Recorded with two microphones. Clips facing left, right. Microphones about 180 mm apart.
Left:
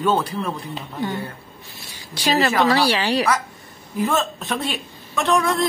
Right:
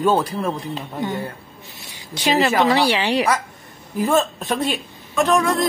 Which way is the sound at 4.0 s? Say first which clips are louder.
Right 3 dB; 40° right (ahead or behind).